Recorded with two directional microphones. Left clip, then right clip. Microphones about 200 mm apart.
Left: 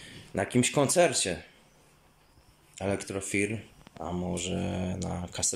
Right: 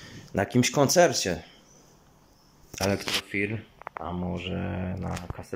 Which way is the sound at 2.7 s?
Centre (ahead or behind).